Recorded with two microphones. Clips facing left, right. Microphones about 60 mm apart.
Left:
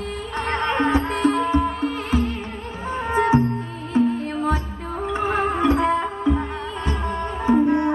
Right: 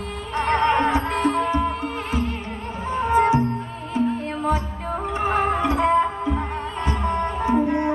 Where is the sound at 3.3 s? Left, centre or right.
Left.